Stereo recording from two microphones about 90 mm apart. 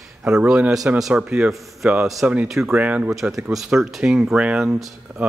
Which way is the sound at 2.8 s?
15° right (ahead or behind).